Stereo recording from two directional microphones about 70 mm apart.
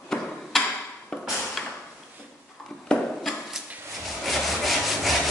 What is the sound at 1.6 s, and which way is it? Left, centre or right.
Drawer open or close, centre.